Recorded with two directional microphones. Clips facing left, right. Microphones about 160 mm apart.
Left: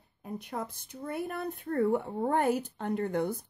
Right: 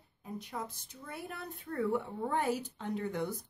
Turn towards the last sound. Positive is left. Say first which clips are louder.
# left 5 dB
turn(degrees=55)  # may be behind; listen again after turning